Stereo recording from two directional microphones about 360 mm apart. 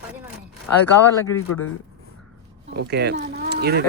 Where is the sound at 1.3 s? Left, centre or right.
Left.